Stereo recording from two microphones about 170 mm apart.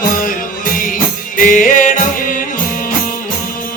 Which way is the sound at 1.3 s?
50° left (ahead or behind).